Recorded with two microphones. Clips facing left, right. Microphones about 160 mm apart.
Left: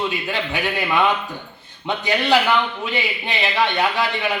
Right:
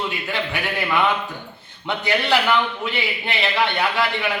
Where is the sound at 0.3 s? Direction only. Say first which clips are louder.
Left 2 dB; 15° left (ahead or behind).